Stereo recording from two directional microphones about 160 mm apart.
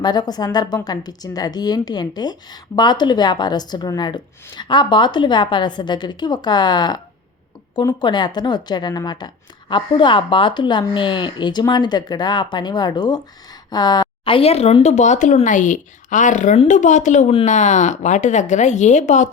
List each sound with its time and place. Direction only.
0.0 s speech: 25° left (ahead or behind); by 19.3 s 50° left (ahead or behind)